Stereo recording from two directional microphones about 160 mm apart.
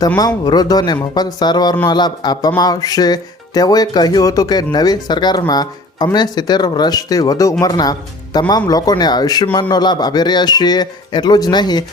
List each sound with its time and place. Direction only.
0.2 s speech: 25° left (ahead or behind)